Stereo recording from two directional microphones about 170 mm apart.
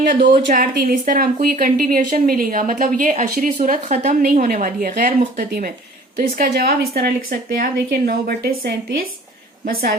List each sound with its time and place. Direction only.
0.0 s speech: 50° right (ahead or behind)